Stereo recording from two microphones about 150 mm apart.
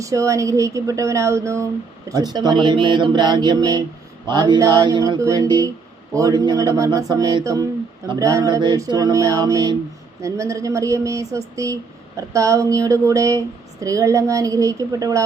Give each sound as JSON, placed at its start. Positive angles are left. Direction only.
{"t": 0.0, "sound": "speech", "side_deg": -20}